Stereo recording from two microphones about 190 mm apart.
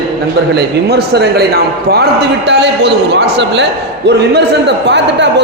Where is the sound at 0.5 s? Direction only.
60° right (ahead or behind).